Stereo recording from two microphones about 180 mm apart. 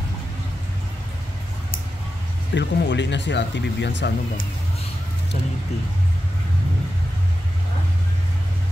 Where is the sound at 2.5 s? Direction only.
75° left (ahead or behind).